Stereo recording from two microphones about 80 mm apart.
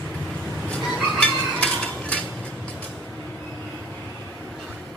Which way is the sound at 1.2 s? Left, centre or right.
Centre.